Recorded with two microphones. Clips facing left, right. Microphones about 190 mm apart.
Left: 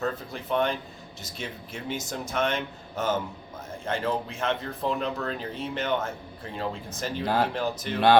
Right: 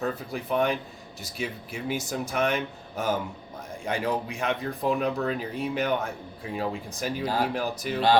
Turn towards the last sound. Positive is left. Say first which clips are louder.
# even
turn(degrees=-10)  # may be behind; listen again after turning